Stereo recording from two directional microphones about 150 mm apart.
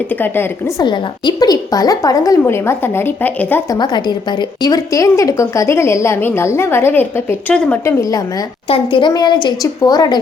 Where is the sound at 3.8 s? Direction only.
30° left (ahead or behind); by 7.8 s 10° left (ahead or behind).